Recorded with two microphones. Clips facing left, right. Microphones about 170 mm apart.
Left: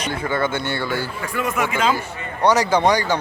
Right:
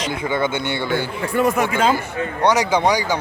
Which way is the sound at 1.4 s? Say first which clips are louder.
Right 6 dB; 35° right (ahead or behind).